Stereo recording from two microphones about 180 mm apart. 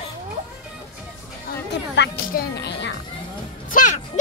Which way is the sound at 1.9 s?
70° left (ahead or behind).